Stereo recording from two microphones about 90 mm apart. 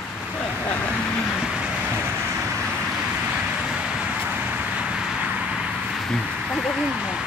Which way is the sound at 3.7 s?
10° right (ahead or behind).